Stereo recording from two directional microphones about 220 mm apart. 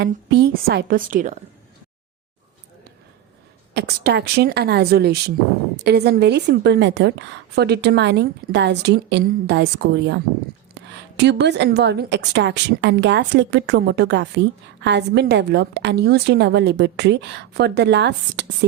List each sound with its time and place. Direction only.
0.0 s a woman's voice: 50° right (ahead or behind)
3.8 s a woman's voice: 50° right (ahead or behind)